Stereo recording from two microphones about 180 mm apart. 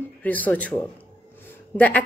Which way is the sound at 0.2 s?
10° left (ahead or behind).